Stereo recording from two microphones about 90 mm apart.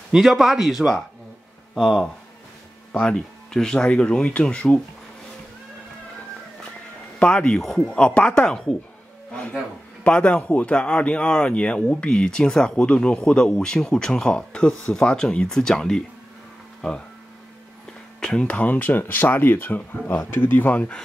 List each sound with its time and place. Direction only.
0.1 s a man's voice: 5° right (ahead or behind); by 4.8 s 15° left (ahead or behind)
7.2 s speech: 10° left (ahead or behind)
9.3 s a sound: 10° left (ahead or behind)
10.0 s speech: 15° left (ahead or behind)
18.2 s speech: 10° left (ahead or behind)